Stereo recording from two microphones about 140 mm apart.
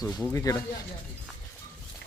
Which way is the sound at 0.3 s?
20° left (ahead or behind).